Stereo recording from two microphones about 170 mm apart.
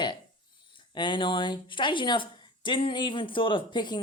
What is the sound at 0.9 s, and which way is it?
A woman's voice, 25° left (ahead or behind).